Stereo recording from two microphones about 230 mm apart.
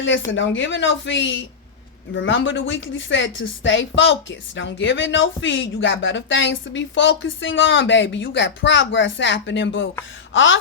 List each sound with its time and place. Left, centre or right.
0.3 s speech: left
10.3 s gasp: left